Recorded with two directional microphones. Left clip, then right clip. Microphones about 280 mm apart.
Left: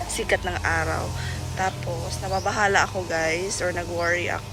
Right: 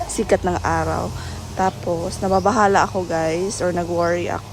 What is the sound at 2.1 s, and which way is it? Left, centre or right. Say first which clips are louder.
Speech: right 8 dB; centre.